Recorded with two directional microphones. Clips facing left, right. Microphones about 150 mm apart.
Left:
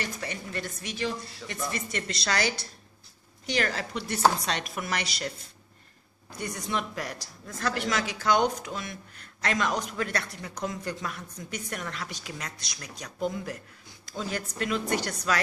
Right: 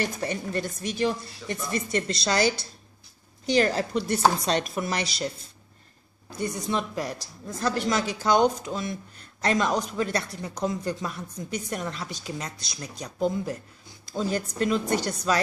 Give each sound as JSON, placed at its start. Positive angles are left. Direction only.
{"t": 0.0, "sound": "a woman's voice", "side_deg": -40}
{"t": 6.3, "sound": "a woman's voice", "side_deg": -30}